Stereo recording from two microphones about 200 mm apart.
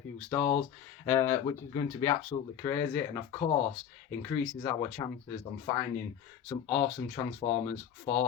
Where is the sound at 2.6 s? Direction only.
10° left (ahead or behind).